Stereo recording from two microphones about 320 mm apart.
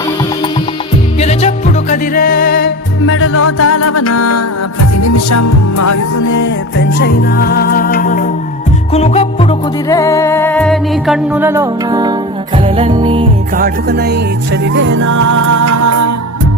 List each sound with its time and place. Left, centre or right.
1.2 s music: centre; by 6.5 s left
6.7 s music: left; by 13.2 s centre
13.6 s music: right
15.2 s music: right